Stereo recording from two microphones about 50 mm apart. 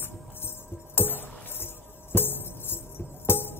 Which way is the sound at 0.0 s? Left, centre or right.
Left.